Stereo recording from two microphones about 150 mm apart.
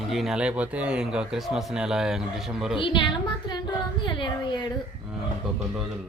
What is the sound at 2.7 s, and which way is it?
Speech, 35° left (ahead or behind).